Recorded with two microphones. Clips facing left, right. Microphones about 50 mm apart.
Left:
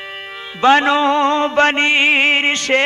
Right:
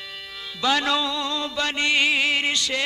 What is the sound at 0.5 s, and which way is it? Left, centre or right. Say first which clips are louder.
Music: left 10 dB; left.